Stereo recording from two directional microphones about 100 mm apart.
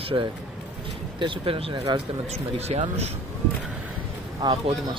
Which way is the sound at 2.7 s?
90° right.